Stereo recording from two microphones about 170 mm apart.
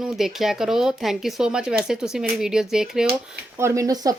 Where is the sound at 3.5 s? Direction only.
15° right (ahead or behind).